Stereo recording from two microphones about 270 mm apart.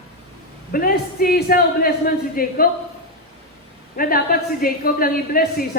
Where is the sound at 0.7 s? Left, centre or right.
Left.